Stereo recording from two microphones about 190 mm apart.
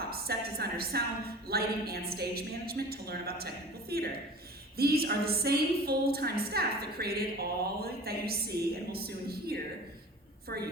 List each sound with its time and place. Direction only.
0.1 s a woman's voice: 55° right (ahead or behind)